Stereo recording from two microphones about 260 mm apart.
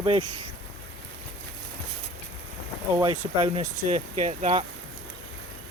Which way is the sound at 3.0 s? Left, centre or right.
Right.